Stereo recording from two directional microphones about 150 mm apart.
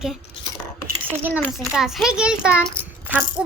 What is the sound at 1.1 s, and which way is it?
Speech, 15° right (ahead or behind).